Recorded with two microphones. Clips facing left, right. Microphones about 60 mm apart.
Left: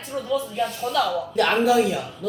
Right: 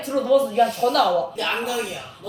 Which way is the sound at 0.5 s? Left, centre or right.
Right.